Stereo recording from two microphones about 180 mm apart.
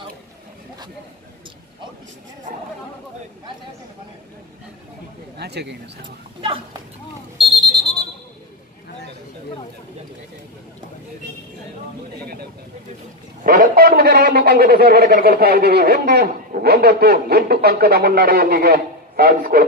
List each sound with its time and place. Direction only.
5.4 s speech: 65° right (ahead or behind)
6.0 s speech: 25° right (ahead or behind)
13.4 s a man's voice: 55° right (ahead or behind)